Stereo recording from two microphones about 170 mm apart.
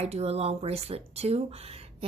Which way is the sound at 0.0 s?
35° right (ahead or behind).